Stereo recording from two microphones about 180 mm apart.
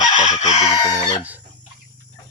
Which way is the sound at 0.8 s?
20° left (ahead or behind).